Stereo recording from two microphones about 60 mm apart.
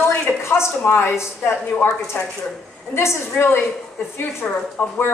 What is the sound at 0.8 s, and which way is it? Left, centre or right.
Speech, left.